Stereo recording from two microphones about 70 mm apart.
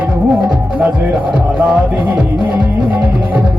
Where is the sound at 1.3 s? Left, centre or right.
Centre.